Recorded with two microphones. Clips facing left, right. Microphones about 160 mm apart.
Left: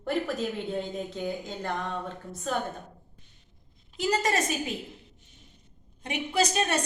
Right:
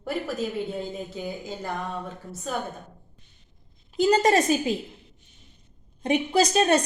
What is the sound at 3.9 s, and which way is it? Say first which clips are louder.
Speech: right 7 dB; 30° right (ahead or behind).